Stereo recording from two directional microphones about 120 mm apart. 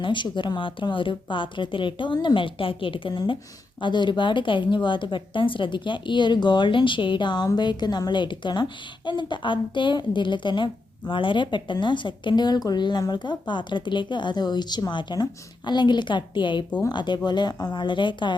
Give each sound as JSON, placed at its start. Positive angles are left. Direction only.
{"t": 0.0, "sound": "speech", "side_deg": 40}